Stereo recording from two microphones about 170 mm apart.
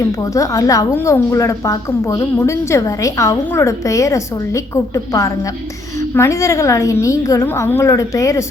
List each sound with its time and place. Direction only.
0.2 s a woman's voice: 20° left (ahead or behind)